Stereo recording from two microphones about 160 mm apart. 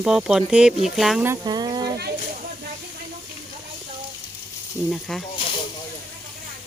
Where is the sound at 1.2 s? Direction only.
20° right (ahead or behind).